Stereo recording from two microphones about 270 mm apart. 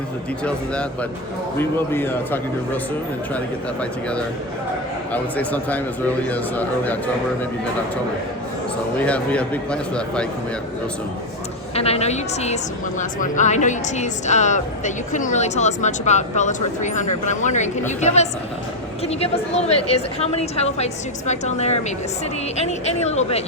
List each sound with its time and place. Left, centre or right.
0.4 s a man's voice: centre
9.0 s speech: centre
11.7 s a woman's voice: left